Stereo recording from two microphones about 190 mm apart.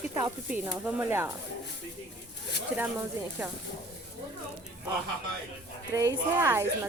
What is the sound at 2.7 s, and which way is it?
Speech, 10° right (ahead or behind).